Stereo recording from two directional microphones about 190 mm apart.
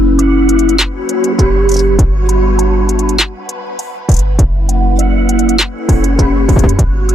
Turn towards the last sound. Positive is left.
turn(degrees=0)  # may be behind; listen again after turning